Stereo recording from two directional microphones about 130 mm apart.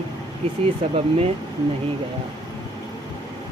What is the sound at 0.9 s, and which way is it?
Speech, 50° right (ahead or behind).